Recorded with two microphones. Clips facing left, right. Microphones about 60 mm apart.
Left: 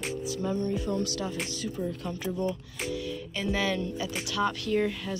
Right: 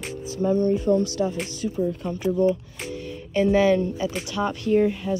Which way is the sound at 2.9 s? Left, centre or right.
Right.